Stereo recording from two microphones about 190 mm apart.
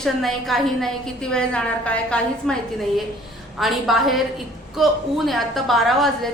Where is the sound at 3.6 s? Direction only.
Centre (ahead or behind).